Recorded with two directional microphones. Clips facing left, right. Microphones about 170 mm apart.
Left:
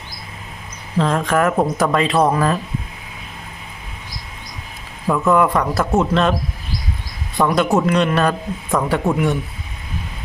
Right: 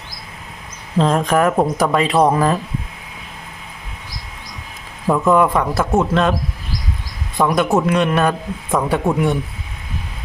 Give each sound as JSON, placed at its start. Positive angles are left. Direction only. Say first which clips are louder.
{"t": 0.9, "sound": "speech", "louder": "right 2 dB", "side_deg": -20}
{"t": 5.0, "sound": "speech", "louder": "right 1 dB", "side_deg": -15}
{"t": 5.5, "sound": "a man's voice", "louder": "right 1 dB", "side_deg": 0}
{"t": 6.0, "sound": "speech", "louder": "even", "side_deg": -10}
{"t": 7.7, "sound": "speech", "louder": "even", "side_deg": -10}